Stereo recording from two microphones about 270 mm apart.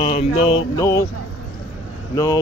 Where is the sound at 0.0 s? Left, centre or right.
Left.